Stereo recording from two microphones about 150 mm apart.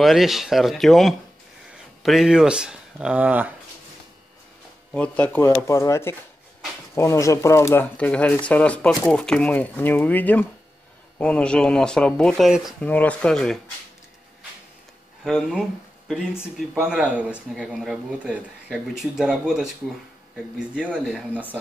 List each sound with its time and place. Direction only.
0.0 s speech: centre (ahead or behind)
4.9 s speech: 10° left (ahead or behind)
12.8 s speech: 10° left (ahead or behind)
16.1 s speech: centre (ahead or behind)